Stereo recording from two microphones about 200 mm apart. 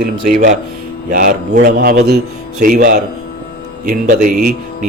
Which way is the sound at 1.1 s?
45° right (ahead or behind).